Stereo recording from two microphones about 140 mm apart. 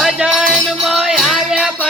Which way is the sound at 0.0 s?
5° right (ahead or behind).